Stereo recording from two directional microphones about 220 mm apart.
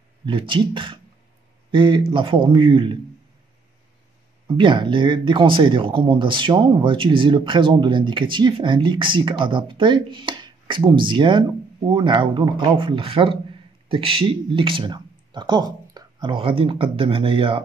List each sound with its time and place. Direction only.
0.2 s speech: 20° right (ahead or behind)
4.6 s speech: 20° right (ahead or behind)